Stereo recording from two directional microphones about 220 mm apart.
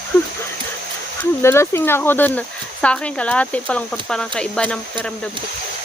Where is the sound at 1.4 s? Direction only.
10° left (ahead or behind).